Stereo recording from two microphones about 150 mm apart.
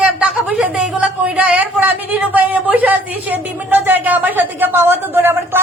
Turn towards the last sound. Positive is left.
turn(degrees=-15)  # may be behind; listen again after turning